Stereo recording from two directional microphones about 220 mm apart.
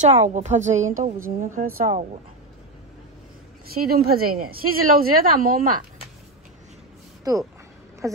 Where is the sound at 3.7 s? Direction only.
45° right (ahead or behind).